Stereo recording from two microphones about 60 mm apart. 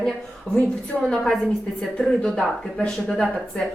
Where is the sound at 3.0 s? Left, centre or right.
Centre.